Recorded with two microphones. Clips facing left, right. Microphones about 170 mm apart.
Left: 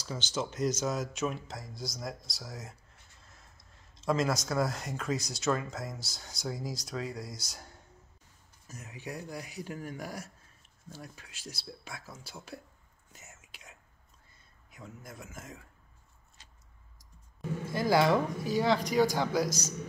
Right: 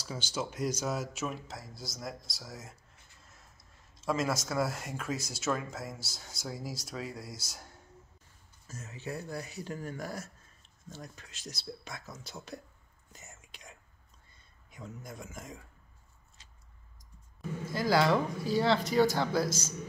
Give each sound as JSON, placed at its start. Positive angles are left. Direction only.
{"t": 0.0, "sound": "speech", "side_deg": -10}
{"t": 8.6, "sound": "speech", "side_deg": 15}
{"t": 13.1, "sound": "whispering", "side_deg": 5}
{"t": 14.7, "sound": "speech", "side_deg": 5}
{"t": 17.6, "sound": "speech", "side_deg": 20}